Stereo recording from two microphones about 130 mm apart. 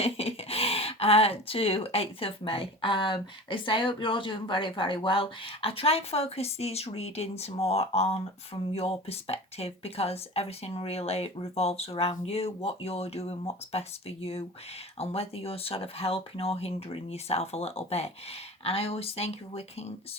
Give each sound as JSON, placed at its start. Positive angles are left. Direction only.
{"t": 0.0, "sound": "speech", "side_deg": 50}